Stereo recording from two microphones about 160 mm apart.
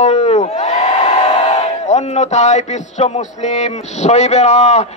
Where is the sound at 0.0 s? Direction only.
45° left (ahead or behind).